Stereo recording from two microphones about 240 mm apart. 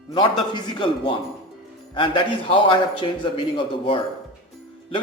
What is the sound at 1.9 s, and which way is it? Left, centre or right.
A man's voice, centre.